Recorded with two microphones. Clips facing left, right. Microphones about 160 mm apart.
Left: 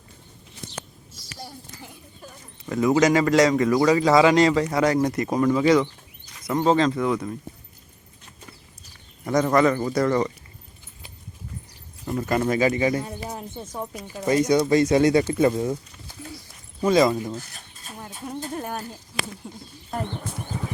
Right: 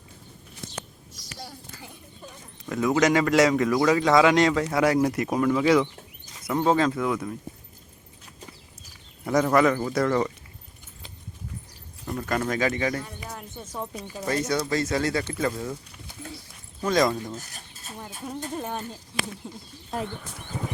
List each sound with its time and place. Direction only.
2.2 s speech: 5° left (ahead or behind)
9.2 s speech: 5° right (ahead or behind)
12.0 s speech: 10° left (ahead or behind)
13.0 s speech: 30° left (ahead or behind)
16.8 s speech: 10° left (ahead or behind)
18.0 s speech: 5° right (ahead or behind)
18.6 s speech: 10° left (ahead or behind)